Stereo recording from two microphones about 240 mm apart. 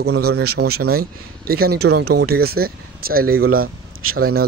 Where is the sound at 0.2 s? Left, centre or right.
Right.